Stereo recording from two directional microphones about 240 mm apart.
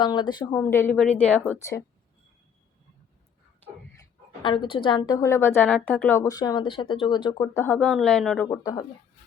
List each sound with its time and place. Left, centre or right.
0.0 s a woman's voice: centre
4.4 s a woman's voice: centre
8.4 s a woman's voice: centre